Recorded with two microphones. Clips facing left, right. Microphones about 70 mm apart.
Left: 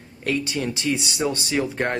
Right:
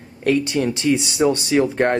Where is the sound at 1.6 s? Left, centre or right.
Right.